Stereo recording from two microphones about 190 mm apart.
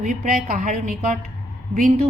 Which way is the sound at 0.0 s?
45° right (ahead or behind).